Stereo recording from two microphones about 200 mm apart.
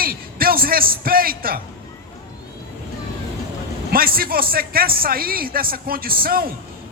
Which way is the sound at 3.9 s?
45° right (ahead or behind).